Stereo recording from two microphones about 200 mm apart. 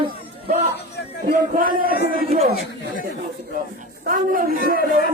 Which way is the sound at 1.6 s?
45° right (ahead or behind).